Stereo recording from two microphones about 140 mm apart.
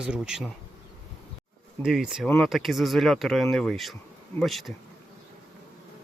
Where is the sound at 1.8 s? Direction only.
5° right (ahead or behind).